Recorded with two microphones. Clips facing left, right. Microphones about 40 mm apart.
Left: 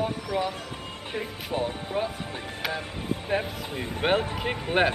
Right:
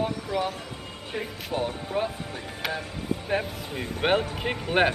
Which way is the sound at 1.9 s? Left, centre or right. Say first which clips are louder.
Right 1 dB; centre.